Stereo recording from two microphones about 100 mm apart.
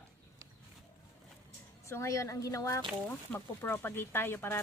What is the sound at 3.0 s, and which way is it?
A woman's voice, 20° left (ahead or behind).